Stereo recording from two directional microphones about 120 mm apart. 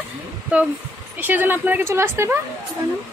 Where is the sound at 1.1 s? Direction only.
15° right (ahead or behind).